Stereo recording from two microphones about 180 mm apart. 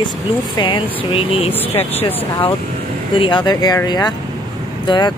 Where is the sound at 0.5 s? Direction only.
25° left (ahead or behind).